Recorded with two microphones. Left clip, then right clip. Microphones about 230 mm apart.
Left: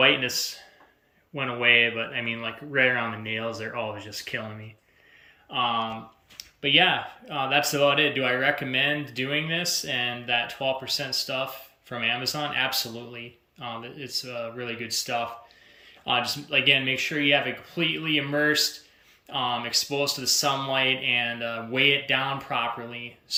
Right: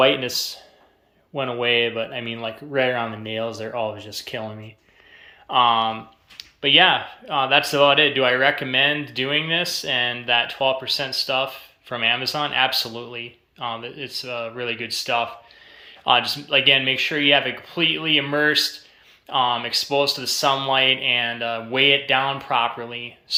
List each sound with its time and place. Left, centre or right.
0.0 s speech: centre
1.4 s speech: centre
6.6 s speech: centre